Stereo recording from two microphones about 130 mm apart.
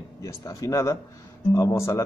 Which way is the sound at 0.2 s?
25° left (ahead or behind).